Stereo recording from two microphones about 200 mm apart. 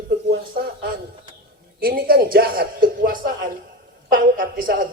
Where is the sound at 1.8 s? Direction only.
50° right (ahead or behind).